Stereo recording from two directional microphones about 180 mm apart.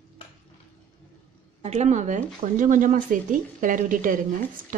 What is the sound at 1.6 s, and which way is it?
Speech, 40° right (ahead or behind).